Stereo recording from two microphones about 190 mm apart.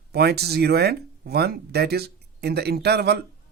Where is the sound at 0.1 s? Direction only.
55° right (ahead or behind).